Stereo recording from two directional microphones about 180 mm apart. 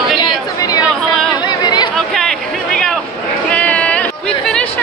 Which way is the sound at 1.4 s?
25° left (ahead or behind).